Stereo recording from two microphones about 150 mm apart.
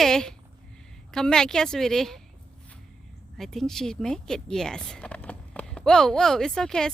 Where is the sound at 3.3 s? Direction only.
Centre (ahead or behind).